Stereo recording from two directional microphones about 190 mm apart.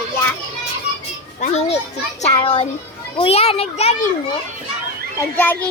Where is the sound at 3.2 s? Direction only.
30° left (ahead or behind).